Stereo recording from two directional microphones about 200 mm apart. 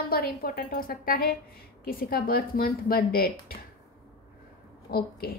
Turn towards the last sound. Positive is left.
turn(degrees=50)  # may be behind; listen again after turning